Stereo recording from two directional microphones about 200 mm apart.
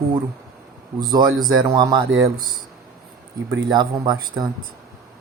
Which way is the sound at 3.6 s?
20° right (ahead or behind).